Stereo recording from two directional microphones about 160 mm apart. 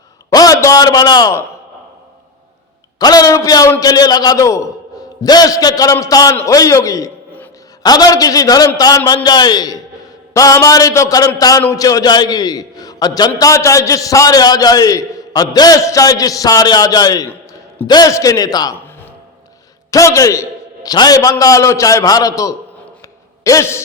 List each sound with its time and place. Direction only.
0.3 s a sound: 20° left (ahead or behind)
3.0 s a man's voice: 25° left (ahead or behind)
19.9 s a man's voice: 20° left (ahead or behind)